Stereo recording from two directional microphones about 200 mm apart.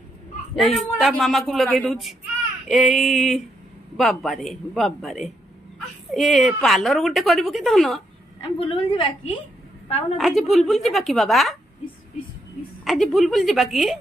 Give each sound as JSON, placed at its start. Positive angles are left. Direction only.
{"t": 0.6, "sound": "a woman's voice", "side_deg": 0}
{"t": 8.4, "sound": "a woman's voice", "side_deg": 25}
{"t": 10.1, "sound": "a woman's voice", "side_deg": 0}
{"t": 12.8, "sound": "a woman's voice", "side_deg": 0}